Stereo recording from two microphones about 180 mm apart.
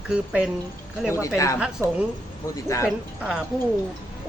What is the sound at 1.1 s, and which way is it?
Speech, 15° left (ahead or behind).